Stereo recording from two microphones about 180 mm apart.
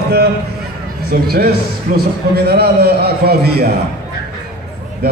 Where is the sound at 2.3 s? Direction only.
60° right (ahead or behind).